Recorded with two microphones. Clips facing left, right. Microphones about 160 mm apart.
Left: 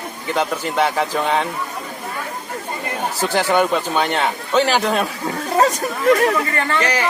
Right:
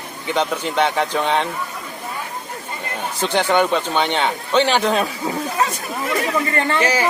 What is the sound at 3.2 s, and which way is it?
Speech, 5° left (ahead or behind).